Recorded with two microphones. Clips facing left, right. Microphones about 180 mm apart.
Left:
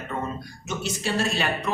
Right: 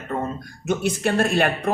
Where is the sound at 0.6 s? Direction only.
55° right (ahead or behind).